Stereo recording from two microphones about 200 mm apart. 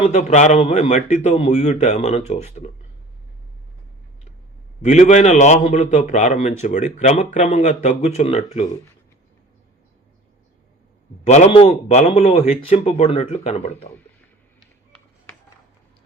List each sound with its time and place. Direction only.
0.1 s a man's voice: 35° left (ahead or behind)
4.8 s a man's voice: 35° left (ahead or behind)
11.2 s a man's voice: 30° left (ahead or behind)